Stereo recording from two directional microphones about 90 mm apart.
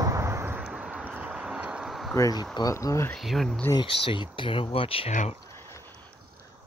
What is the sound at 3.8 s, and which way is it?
Speech, 70° left (ahead or behind).